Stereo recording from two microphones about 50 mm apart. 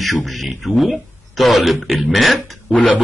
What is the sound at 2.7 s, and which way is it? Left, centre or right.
Speech, left.